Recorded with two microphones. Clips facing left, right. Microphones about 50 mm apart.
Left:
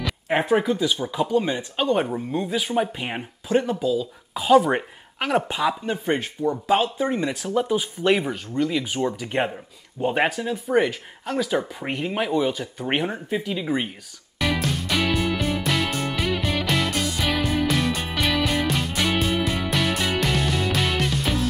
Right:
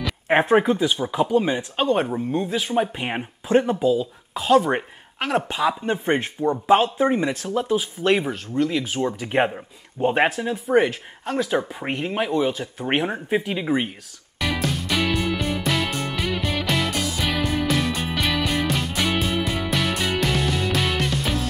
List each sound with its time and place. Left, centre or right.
0.3 s speech: right
1.0 s speech: centre
1.8 s speech: centre
3.0 s speech: centre
4.3 s speech: centre
5.9 s speech: right; by 13.2 s centre
13.3 s speech: right
13.7 s speech: centre
14.4 s music: centre